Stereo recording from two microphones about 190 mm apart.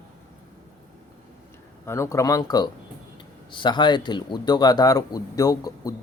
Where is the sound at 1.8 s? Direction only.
15° left (ahead or behind).